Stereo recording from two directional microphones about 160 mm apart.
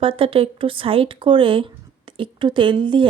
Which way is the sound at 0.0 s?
35° right (ahead or behind).